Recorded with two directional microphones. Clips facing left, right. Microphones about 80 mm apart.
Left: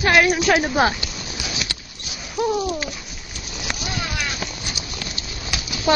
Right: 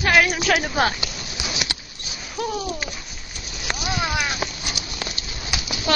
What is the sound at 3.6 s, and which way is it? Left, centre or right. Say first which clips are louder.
Vehicle: right 3 dB; centre.